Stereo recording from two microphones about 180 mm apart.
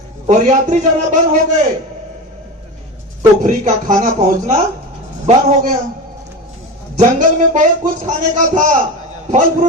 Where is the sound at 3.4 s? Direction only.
45° right (ahead or behind).